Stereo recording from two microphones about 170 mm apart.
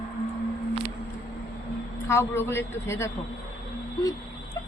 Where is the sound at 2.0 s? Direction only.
15° left (ahead or behind).